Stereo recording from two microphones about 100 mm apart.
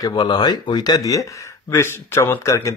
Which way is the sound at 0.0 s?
45° left (ahead or behind).